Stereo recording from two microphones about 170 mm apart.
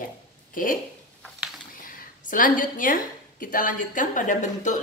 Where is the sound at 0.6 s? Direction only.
55° left (ahead or behind).